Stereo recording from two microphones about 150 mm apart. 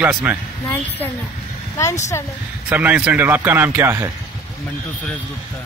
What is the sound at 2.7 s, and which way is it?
Speech, 10° right (ahead or behind).